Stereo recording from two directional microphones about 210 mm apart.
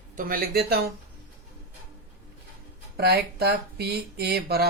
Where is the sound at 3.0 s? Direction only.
50° right (ahead or behind).